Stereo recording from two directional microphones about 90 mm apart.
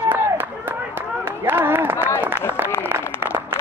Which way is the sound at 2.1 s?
20° right (ahead or behind).